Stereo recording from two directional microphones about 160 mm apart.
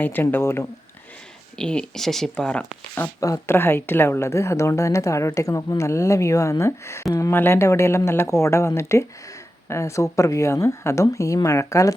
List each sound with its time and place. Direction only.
0.0 s speech: 10° left (ahead or behind)
2.9 s a woman's voice: 15° left (ahead or behind)